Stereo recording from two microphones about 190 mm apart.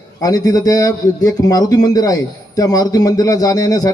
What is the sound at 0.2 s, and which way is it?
A man's voice, 20° left (ahead or behind).